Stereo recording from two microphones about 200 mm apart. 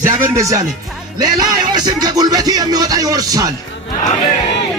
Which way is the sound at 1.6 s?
20° right (ahead or behind).